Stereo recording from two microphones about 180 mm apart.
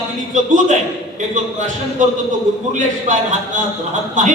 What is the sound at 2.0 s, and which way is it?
Speech, 45° right (ahead or behind).